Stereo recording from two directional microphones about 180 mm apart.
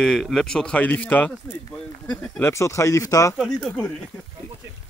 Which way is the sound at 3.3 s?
Centre (ahead or behind).